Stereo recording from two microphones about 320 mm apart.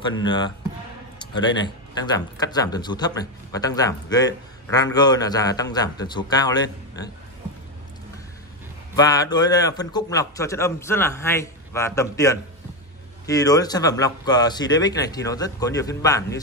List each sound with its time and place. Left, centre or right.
0.2 s a man's voice: centre
8.9 s a man's voice: centre